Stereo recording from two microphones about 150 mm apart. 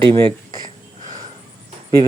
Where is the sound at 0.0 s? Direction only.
35° right (ahead or behind).